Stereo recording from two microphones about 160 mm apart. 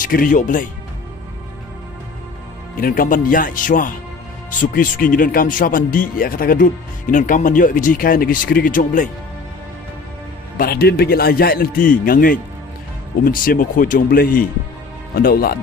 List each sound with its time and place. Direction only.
0.0 s speech: 60° left (ahead or behind)
2.8 s speech: 60° left (ahead or behind)
10.6 s a man's voice: 70° left (ahead or behind)